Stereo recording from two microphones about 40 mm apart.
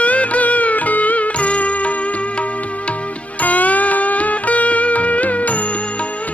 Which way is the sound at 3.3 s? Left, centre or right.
Left.